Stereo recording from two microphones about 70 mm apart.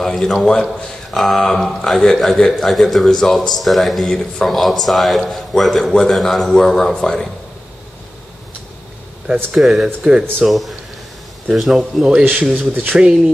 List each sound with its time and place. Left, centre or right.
0.0 s a man's voice: centre
4.1 s a man's voice: centre
9.6 s a man's voice: centre
12.5 s speech: right
13.0 s a man's voice: centre